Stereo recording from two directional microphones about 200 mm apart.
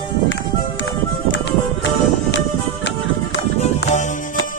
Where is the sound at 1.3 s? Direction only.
65° left (ahead or behind).